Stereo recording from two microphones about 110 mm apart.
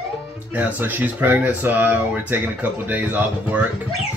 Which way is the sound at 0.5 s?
15° right (ahead or behind).